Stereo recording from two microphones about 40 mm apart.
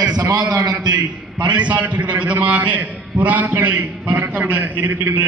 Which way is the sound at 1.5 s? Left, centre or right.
Right.